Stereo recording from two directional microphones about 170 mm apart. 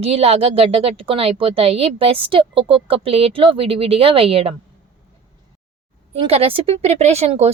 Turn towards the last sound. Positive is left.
turn(degrees=-40)  # may be behind; listen again after turning